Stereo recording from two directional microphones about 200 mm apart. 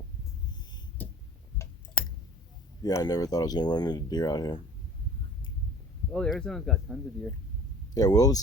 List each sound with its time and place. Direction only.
1.0 s a sound: 10° left (ahead or behind)
2.8 s speech: 20° left (ahead or behind)
6.1 s speech: 5° left (ahead or behind)
7.9 s speech: 20° left (ahead or behind)